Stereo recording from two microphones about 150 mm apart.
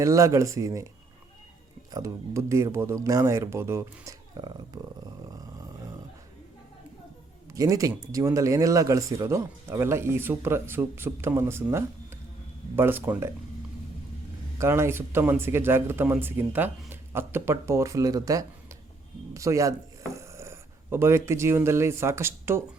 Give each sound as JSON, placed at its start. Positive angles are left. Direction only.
{"t": 0.0, "sound": "speech", "side_deg": -20}
{"t": 1.9, "sound": "speech", "side_deg": -20}
{"t": 5.3, "sound": "a sound", "side_deg": -25}
{"t": 7.5, "sound": "speech", "side_deg": -20}
{"t": 14.6, "sound": "speech", "side_deg": -15}